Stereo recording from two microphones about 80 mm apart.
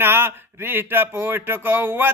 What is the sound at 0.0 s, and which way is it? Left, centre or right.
Speech, right.